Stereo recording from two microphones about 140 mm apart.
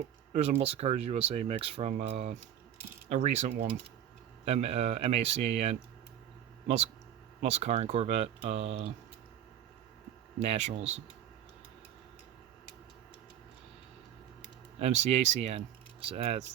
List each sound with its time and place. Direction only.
0.6 s speech: 45° right (ahead or behind)
7.4 s speech: 50° right (ahead or behind)
10.4 s speech: 45° right (ahead or behind)
14.8 s speech: 50° right (ahead or behind)